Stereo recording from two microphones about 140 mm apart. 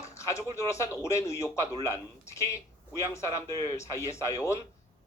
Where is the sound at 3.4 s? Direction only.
30° right (ahead or behind).